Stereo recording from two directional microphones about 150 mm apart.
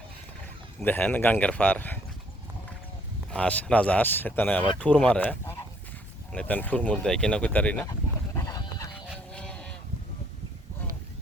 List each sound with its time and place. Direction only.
0.8 s speech: 10° left (ahead or behind)
3.2 s speech: 5° left (ahead or behind)
7.9 s goat: 25° left (ahead or behind)
9.1 s a sound: 5° left (ahead or behind)